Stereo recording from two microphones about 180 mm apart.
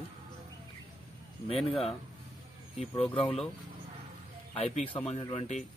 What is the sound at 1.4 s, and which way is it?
Speech, 30° left (ahead or behind).